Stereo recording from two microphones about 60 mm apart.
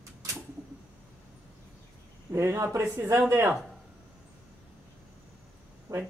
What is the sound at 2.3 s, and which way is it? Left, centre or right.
Speech, right.